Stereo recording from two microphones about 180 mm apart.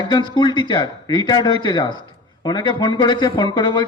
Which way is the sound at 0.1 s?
25° left (ahead or behind).